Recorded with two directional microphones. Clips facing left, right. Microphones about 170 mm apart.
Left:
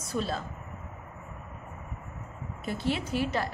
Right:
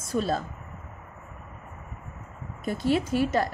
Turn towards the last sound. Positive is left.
turn(degrees=-45)  # may be behind; listen again after turning